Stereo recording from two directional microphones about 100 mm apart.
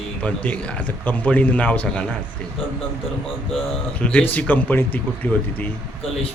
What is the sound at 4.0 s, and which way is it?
Speech, 15° left (ahead or behind).